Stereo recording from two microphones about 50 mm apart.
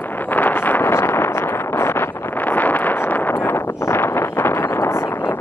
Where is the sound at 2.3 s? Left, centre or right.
Left.